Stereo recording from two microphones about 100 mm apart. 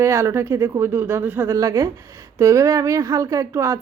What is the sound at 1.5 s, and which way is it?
A woman's voice, 35° right (ahead or behind).